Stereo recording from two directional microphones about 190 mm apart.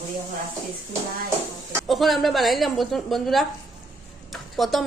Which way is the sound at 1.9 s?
Centre (ahead or behind).